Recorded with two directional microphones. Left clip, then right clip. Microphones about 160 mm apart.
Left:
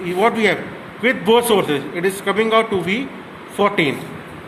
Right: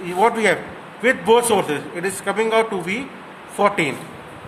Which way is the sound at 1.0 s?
30° right (ahead or behind).